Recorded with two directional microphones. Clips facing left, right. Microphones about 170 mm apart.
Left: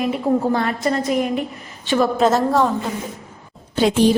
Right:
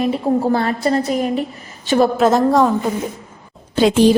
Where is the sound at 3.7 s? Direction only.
90° right.